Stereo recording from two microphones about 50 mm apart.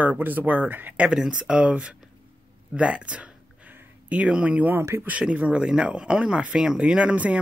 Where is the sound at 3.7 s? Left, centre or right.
Right.